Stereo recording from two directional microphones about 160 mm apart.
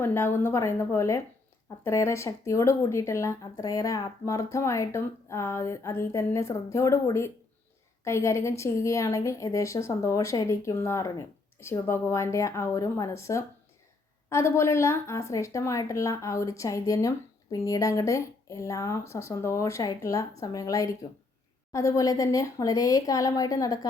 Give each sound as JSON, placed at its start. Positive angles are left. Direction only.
{"t": 0.0, "sound": "a woman's voice", "side_deg": 15}